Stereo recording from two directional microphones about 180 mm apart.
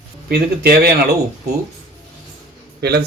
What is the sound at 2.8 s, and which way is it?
Speech, 65° right (ahead or behind).